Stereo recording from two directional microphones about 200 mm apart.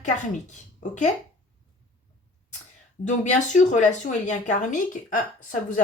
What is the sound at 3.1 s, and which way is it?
A woman's voice, 40° left (ahead or behind).